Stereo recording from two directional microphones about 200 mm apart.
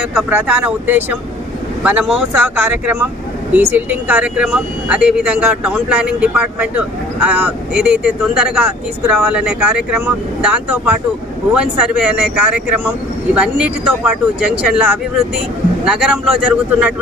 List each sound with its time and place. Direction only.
0.0 s speech: 5° right (ahead or behind)